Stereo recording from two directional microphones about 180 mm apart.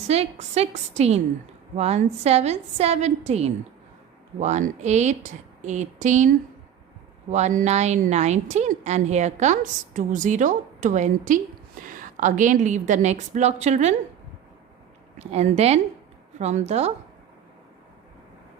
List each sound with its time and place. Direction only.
0.1 s a woman's voice: 35° right (ahead or behind)
15.3 s a woman's voice: 35° right (ahead or behind)